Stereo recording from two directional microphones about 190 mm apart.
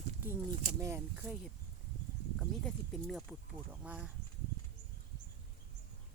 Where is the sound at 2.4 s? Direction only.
Centre (ahead or behind).